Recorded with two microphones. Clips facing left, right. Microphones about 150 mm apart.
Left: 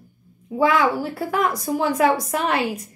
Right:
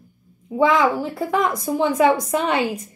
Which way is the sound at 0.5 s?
5° left (ahead or behind).